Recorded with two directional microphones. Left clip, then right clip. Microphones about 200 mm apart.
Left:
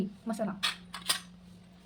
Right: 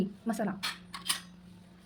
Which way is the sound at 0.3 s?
20° right (ahead or behind).